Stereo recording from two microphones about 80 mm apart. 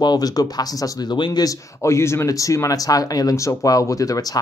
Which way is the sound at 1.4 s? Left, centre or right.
Left.